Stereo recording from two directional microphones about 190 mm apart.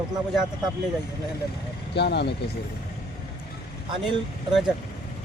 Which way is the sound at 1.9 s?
60° left (ahead or behind).